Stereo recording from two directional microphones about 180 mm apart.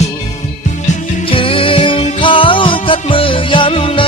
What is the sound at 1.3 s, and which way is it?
Music, 30° left (ahead or behind).